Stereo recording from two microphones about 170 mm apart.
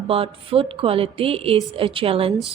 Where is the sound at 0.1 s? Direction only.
35° right (ahead or behind).